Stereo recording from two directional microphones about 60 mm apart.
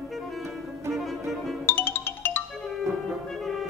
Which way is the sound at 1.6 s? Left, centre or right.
Left.